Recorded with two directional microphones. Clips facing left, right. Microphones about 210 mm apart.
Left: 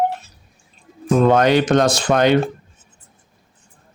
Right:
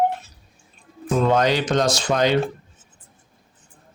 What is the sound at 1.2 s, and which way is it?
A man's voice, 55° left (ahead or behind).